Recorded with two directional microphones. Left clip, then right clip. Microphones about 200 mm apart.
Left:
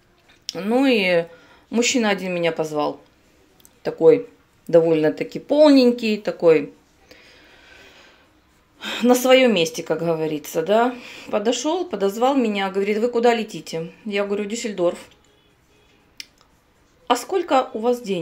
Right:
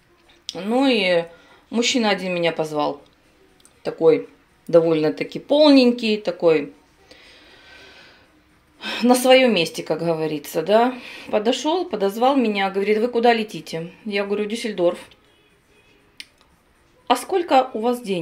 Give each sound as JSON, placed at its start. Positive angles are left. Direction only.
{"t": 0.5, "sound": "speech", "side_deg": 15}
{"t": 3.8, "sound": "speech", "side_deg": 15}
{"t": 7.1, "sound": "a sound", "side_deg": 5}
{"t": 8.7, "sound": "a woman's voice", "side_deg": 0}
{"t": 17.1, "sound": "a woman's voice", "side_deg": 0}